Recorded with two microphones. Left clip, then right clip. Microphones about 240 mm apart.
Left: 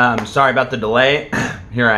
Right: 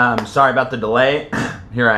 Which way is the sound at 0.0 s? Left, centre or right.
Centre.